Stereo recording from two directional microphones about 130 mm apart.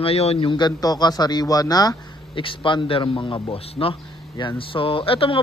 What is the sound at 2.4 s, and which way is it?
A man's voice, 40° left (ahead or behind).